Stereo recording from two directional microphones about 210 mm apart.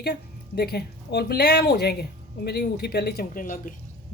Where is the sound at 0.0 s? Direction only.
50° left (ahead or behind).